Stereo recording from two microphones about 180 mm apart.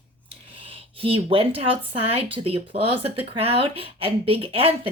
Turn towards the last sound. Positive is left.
turn(degrees=-30)  # may be behind; listen again after turning